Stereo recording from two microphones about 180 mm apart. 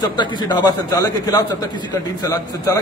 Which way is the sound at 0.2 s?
25° left (ahead or behind).